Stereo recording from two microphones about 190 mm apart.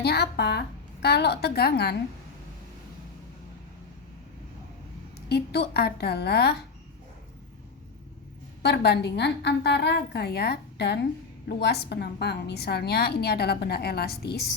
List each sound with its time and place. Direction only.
0.0 s a woman's voice: 60° left (ahead or behind)
5.3 s a woman's voice: 60° left (ahead or behind)
8.6 s a woman's voice: 60° left (ahead or behind)